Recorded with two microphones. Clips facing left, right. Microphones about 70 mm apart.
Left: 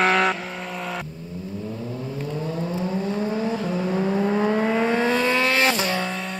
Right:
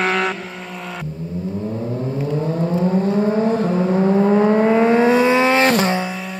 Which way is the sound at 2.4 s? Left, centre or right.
Right.